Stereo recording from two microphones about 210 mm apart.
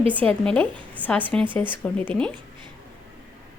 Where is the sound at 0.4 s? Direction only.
5° left (ahead or behind).